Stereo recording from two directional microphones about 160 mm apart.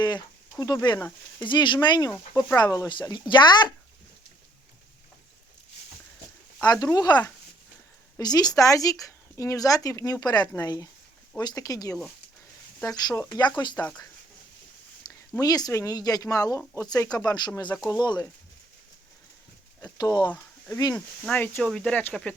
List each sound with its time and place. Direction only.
1.4 s speech: 30° left (ahead or behind)
2.1 s speech: 10° left (ahead or behind)
2.6 s speech: 25° left (ahead or behind)
6.6 s speech: 25° left (ahead or behind)
8.2 s speech: 25° left (ahead or behind)
13.0 s speech: 25° left (ahead or behind)
15.1 s a sound: 25° left (ahead or behind)
15.4 s speech: 25° left (ahead or behind)
19.8 s speech: 25° left (ahead or behind)
20.9 s speech: 10° left (ahead or behind)